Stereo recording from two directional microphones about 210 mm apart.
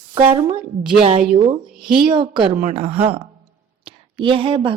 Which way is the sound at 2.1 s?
20° right (ahead or behind).